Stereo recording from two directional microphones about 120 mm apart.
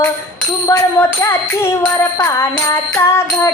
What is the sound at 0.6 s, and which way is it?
Music, 25° left (ahead or behind).